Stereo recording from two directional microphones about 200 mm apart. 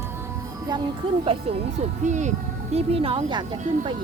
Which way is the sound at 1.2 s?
30° right (ahead or behind).